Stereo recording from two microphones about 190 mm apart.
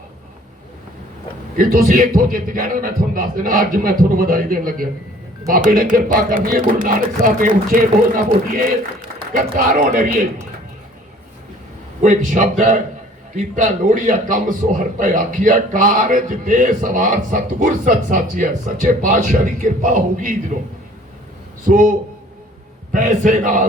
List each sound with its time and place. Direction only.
1.5 s a man's voice: 50° right (ahead or behind)
12.0 s a man's voice: 40° right (ahead or behind)
21.7 s a man's voice: 45° right (ahead or behind)